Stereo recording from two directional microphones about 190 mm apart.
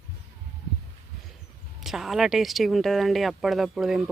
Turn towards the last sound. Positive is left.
turn(degrees=0)  # may be behind; listen again after turning